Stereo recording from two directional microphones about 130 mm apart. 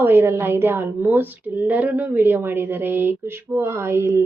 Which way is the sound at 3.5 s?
20° right (ahead or behind).